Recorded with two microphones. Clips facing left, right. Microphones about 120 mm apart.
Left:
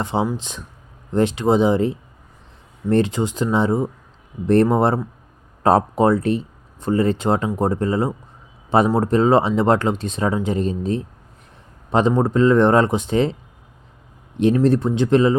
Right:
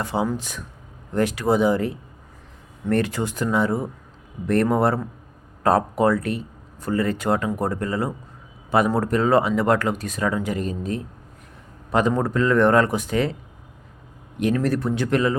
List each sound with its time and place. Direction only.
0.0 s speech: 25° left (ahead or behind)
14.6 s speech: 25° left (ahead or behind)